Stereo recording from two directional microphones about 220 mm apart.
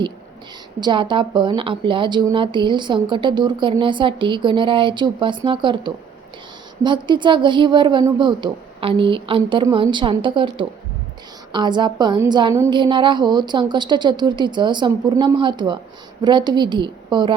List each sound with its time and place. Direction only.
0.8 s a woman's voice: 20° right (ahead or behind)